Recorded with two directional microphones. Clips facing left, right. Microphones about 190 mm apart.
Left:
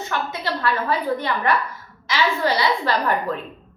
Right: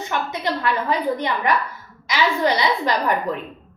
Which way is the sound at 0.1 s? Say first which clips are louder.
Right 2 dB; 20° right (ahead or behind).